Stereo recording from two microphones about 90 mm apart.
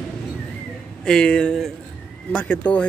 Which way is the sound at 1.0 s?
10° left (ahead or behind).